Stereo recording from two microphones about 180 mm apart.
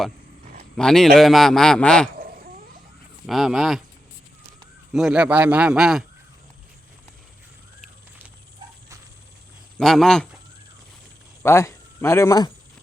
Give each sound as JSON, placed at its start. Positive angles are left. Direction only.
{"t": 0.8, "sound": "a man's voice", "side_deg": 5}
{"t": 2.1, "sound": "a sound", "side_deg": -55}
{"t": 3.2, "sound": "a man's voice", "side_deg": 0}
{"t": 4.9, "sound": "a man's voice", "side_deg": -5}
{"t": 9.7, "sound": "a man's voice", "side_deg": 0}
{"t": 11.4, "sound": "speech", "side_deg": 15}